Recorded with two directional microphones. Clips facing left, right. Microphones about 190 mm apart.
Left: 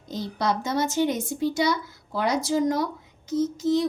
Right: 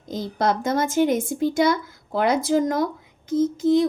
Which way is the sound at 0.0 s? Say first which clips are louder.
Right 4 dB; 50° right (ahead or behind).